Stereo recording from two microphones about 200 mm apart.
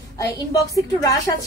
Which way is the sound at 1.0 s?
15° left (ahead or behind).